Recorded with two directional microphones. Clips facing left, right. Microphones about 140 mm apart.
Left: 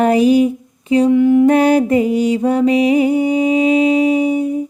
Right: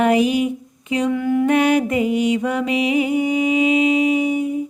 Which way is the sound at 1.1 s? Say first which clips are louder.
Left 9 dB; 20° left (ahead or behind).